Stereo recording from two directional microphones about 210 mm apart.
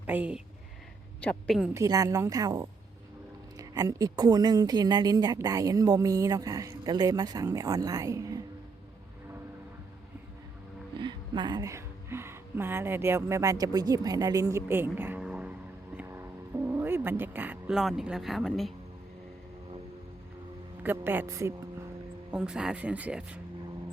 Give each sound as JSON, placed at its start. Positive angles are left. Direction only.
{"t": 0.0, "sound": "speech", "side_deg": -10}
{"t": 1.7, "sound": "a woman's voice", "side_deg": -15}
{"t": 10.9, "sound": "speech", "side_deg": -20}
{"t": 16.0, "sound": "music", "side_deg": -10}
{"t": 20.8, "sound": "a woman's voice", "side_deg": -10}